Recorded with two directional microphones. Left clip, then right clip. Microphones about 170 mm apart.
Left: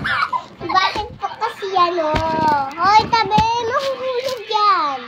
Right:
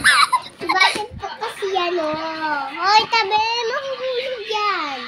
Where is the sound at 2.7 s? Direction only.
40° right (ahead or behind).